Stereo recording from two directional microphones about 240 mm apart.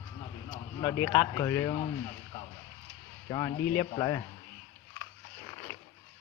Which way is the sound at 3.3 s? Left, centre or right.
Centre.